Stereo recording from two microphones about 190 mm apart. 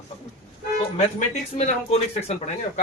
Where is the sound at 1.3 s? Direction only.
35° left (ahead or behind).